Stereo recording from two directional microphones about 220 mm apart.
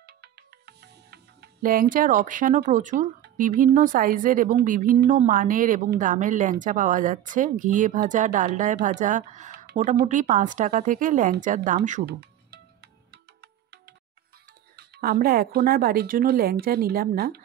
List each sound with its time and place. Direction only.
0.0 s speech: 45° right (ahead or behind)
12.1 s music: 50° right (ahead or behind)
14.8 s speech: 45° right (ahead or behind)